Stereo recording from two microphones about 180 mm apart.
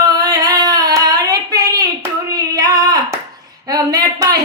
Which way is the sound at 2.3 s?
20° right (ahead or behind).